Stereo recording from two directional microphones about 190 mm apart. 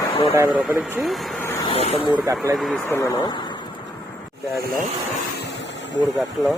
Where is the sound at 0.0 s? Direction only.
20° left (ahead or behind).